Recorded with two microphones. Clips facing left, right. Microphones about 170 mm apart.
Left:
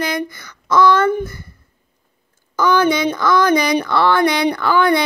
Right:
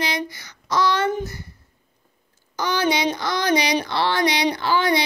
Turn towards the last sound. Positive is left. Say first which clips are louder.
# left 5 dB
turn(degrees=55)  # may be behind; listen again after turning